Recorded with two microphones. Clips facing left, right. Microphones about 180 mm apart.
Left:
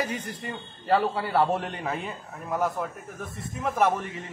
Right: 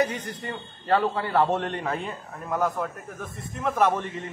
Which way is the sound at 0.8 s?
5° left (ahead or behind).